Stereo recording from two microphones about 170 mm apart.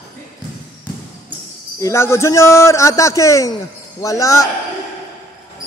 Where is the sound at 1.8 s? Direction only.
15° left (ahead or behind).